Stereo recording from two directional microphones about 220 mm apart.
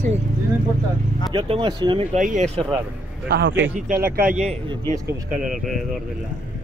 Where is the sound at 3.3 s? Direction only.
50° right (ahead or behind).